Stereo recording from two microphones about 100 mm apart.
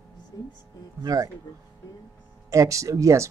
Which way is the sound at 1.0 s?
40° right (ahead or behind).